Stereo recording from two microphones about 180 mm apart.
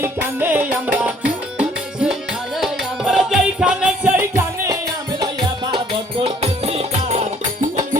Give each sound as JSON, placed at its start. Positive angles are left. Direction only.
{"t": 0.0, "sound": "music", "side_deg": -10}
{"t": 5.7, "sound": "music", "side_deg": -30}